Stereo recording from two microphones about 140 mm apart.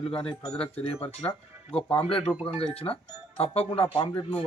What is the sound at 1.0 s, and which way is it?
Speech, 40° left (ahead or behind).